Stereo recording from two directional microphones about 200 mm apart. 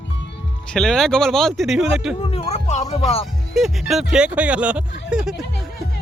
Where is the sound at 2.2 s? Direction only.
30° left (ahead or behind).